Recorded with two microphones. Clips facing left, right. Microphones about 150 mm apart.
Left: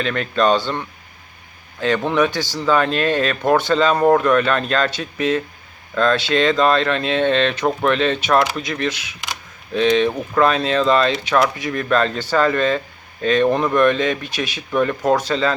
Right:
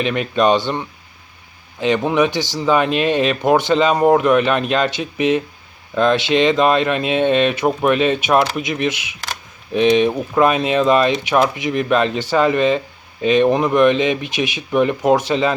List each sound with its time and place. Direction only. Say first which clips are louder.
0.0 s speech: right 2 dB; 15° right (ahead or behind)